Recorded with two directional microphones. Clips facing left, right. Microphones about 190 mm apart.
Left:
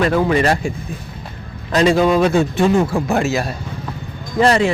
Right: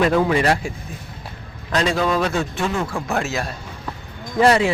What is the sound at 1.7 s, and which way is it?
Speech, centre (ahead or behind).